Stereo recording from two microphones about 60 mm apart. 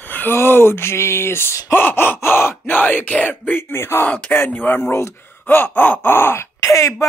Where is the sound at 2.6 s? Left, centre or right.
Left.